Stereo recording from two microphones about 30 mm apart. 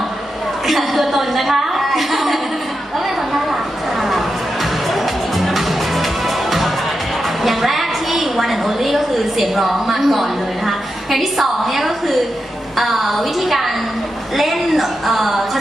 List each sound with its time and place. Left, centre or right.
0.7 s a woman's voice: centre
4.9 s music: centre
7.4 s a sound: centre
12.7 s a woman's voice: centre